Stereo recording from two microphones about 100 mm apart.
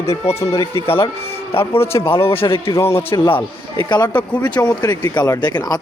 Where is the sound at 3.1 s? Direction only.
40° left (ahead or behind).